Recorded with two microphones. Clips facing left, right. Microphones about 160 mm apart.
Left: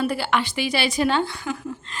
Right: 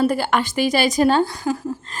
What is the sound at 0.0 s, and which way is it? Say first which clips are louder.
A woman's voice: right 4 dB; 45° right (ahead or behind).